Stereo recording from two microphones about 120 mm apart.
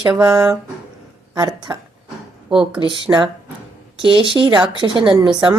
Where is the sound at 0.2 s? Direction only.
35° right (ahead or behind).